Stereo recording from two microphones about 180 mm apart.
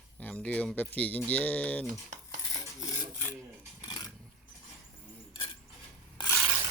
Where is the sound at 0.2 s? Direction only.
10° left (ahead or behind).